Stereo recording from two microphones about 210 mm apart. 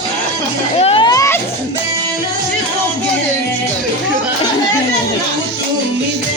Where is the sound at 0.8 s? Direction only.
25° left (ahead or behind).